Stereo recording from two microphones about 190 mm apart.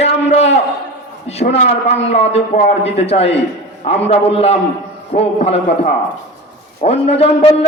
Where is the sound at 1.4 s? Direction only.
45° left (ahead or behind).